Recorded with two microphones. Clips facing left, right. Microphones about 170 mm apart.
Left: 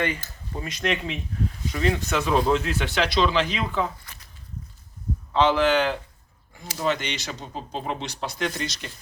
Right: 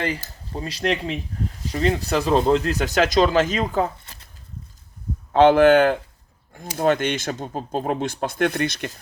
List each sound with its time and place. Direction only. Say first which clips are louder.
0.0 s speech: right 1 dB; 30° right (ahead or behind)
4.0 s a sound: right 1 dB; 25° right (ahead or behind)
5.3 s speech: right 7 dB; 55° right (ahead or behind)